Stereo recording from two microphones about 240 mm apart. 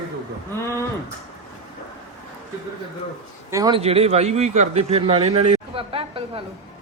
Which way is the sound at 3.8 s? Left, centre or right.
Right.